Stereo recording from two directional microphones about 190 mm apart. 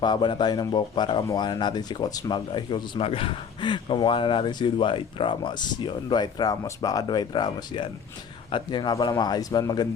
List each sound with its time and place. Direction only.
0.0 s speech: 25° left (ahead or behind)